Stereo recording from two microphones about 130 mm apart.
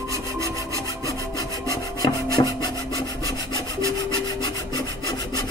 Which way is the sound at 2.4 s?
35° left (ahead or behind).